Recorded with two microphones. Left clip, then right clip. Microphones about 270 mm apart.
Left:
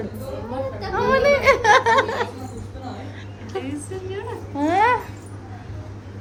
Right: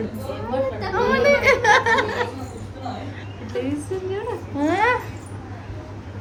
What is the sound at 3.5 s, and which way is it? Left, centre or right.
Speech, centre.